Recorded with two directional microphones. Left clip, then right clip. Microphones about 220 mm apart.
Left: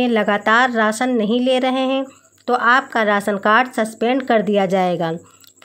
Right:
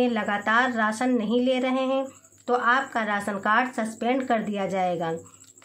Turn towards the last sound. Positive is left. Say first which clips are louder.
# left 8 dB
turn(degrees=40)  # may be behind; listen again after turning